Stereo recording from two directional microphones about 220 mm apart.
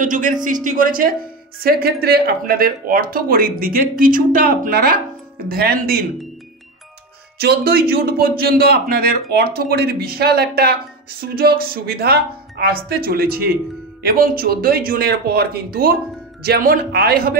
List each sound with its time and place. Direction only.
0.0 s a man's voice: 35° right (ahead or behind)
7.3 s a man's voice: 45° right (ahead or behind)